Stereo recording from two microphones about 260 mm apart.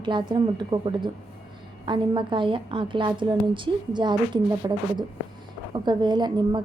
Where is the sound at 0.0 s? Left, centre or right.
Centre.